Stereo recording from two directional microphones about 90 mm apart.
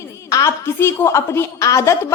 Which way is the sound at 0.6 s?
25° left (ahead or behind).